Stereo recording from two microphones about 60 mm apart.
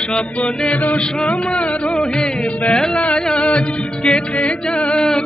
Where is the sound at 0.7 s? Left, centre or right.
Left.